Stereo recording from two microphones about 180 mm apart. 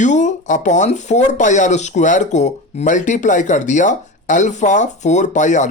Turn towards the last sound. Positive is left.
turn(degrees=40)  # may be behind; listen again after turning